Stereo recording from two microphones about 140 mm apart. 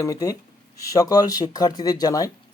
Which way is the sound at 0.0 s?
25° left (ahead or behind).